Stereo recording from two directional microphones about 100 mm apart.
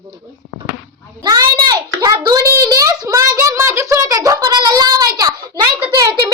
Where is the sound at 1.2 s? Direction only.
45° right (ahead or behind).